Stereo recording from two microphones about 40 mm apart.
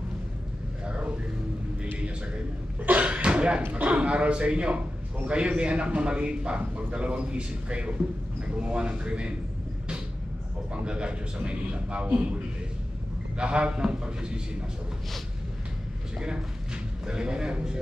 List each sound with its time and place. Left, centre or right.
0.8 s a sound: right
3.0 s cough: right
3.7 s a man's voice: right
10.7 s a man's voice: right
13.4 s a man's voice: right
16.2 s a man's voice: right